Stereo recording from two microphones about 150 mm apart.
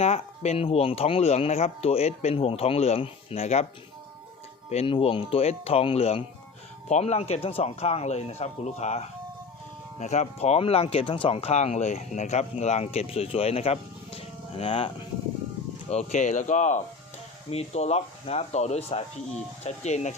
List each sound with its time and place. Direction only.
0.0 s speech: 45° left (ahead or behind)
4.7 s speech: 40° left (ahead or behind)